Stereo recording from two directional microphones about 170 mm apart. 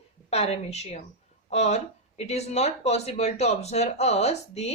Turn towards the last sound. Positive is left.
turn(degrees=40)  # may be behind; listen again after turning